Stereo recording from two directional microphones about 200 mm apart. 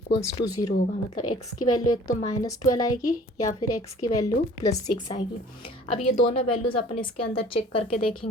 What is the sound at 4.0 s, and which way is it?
Speech, 15° left (ahead or behind).